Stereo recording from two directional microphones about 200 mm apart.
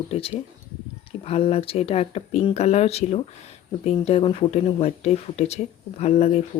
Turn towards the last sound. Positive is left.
turn(degrees=30)  # may be behind; listen again after turning